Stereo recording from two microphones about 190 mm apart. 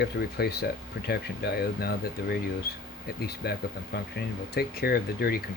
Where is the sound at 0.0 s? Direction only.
55° left (ahead or behind).